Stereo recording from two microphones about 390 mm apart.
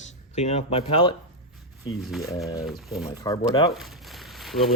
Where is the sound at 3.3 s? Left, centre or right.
Centre.